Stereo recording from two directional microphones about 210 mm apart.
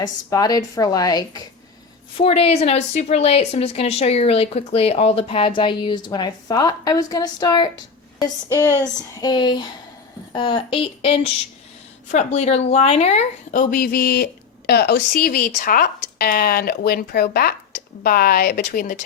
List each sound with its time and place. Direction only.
0.0 s speech: 20° left (ahead or behind)
2.1 s a woman's voice: 30° left (ahead or behind)